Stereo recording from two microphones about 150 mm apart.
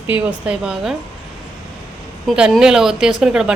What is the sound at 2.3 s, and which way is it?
A woman's voice, 5° right (ahead or behind).